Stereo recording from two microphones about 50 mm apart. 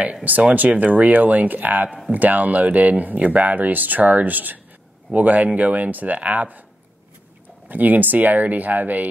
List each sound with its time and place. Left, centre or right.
0.0 s speech: right
7.6 s speech: right